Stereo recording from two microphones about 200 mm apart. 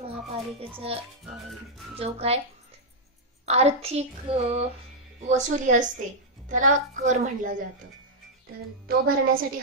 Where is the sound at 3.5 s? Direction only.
30° right (ahead or behind).